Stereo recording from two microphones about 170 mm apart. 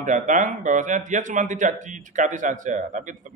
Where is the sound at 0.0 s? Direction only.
45° right (ahead or behind).